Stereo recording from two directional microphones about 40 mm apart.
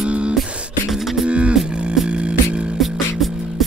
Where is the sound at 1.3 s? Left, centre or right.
Right.